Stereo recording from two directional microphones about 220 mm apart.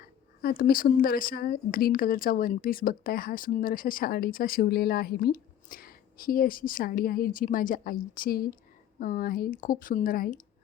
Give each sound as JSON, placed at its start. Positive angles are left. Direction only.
{"t": 0.4, "sound": "a woman's voice", "side_deg": 40}